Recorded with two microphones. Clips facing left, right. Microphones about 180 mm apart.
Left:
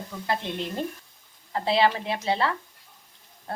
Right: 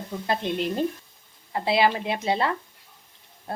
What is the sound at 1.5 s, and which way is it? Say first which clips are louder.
Speech: right 1 dB; 10° right (ahead or behind).